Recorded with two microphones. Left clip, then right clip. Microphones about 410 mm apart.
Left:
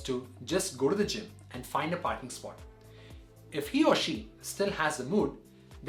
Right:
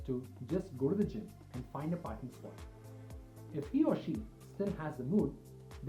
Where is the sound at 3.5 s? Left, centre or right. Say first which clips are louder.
Left 7 dB; centre.